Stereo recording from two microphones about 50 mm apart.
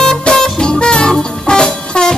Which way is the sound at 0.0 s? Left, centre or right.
Centre.